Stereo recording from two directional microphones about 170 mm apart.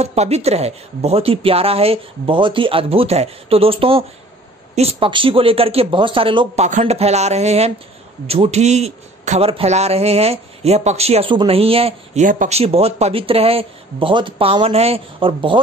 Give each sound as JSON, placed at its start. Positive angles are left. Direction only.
{"t": 0.0, "sound": "a man's voice", "side_deg": -40}